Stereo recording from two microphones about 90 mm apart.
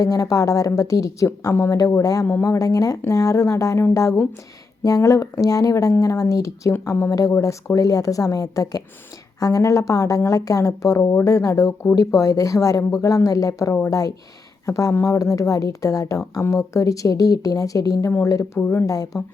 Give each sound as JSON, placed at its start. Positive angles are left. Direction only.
{"t": 0.0, "sound": "a woman's voice", "side_deg": 40}
{"t": 18.6, "sound": "speech", "side_deg": 20}
{"t": 18.9, "sound": "a woman's voice", "side_deg": 40}